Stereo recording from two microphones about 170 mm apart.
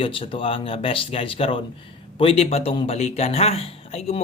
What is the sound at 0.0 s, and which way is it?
Speech, 30° left (ahead or behind).